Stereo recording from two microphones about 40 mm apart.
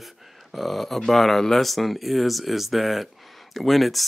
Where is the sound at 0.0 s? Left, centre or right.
Centre.